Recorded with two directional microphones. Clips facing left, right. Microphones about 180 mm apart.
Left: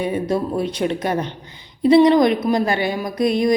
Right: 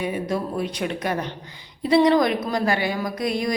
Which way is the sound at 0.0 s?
30° left (ahead or behind).